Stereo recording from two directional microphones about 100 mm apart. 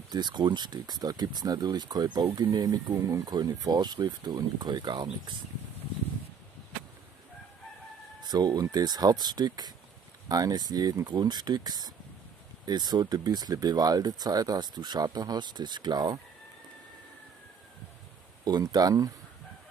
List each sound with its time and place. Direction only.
0.1 s speech: 45° right (ahead or behind)
8.2 s speech: 45° right (ahead or behind)
18.4 s speech: 40° right (ahead or behind)